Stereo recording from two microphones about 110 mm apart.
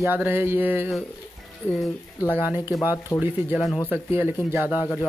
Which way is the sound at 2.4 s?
20° right (ahead or behind).